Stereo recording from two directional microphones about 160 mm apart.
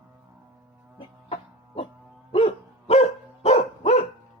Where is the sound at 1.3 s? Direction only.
35° left (ahead or behind).